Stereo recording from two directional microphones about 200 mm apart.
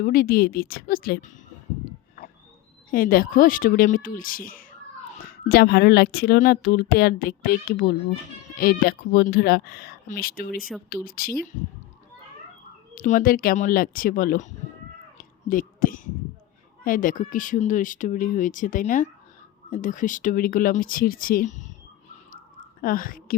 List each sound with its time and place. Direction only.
0.0 s speech: 45° left (ahead or behind)
2.9 s speech: 45° left (ahead or behind)
12.9 s speech: 45° left (ahead or behind)
15.2 s a sound: 45° left (ahead or behind)
16.8 s speech: 45° left (ahead or behind)
22.8 s speech: 45° left (ahead or behind)